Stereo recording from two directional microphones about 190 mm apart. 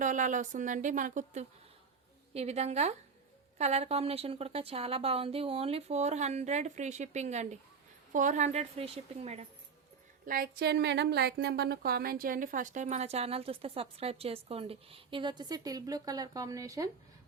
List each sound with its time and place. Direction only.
0.0 s speech: 40° right (ahead or behind)
10.2 s speech: 50° right (ahead or behind); by 16.9 s 15° right (ahead or behind)